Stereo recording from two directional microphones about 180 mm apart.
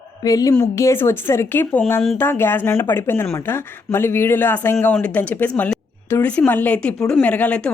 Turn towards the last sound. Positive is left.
turn(degrees=5)  # may be behind; listen again after turning